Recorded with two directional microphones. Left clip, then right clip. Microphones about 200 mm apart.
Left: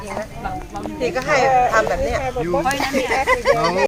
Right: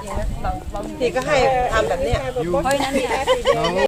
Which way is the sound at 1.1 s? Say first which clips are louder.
Left 2 dB; 25° right (ahead or behind).